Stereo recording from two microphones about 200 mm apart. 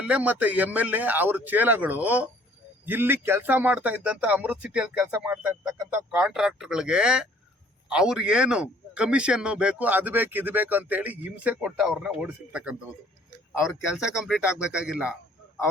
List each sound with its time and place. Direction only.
0.0 s a man's voice: 5° right (ahead or behind)